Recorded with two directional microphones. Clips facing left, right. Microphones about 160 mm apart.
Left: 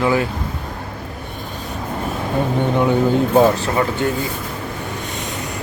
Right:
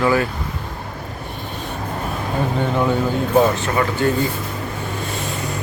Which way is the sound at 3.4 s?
30° left (ahead or behind).